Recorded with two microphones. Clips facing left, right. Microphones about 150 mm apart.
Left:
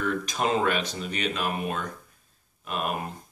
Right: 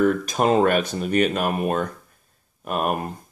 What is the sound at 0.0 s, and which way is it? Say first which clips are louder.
Speech: right 8 dB; 45° right (ahead or behind).